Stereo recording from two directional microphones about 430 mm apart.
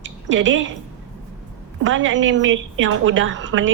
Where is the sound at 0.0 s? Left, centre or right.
Right.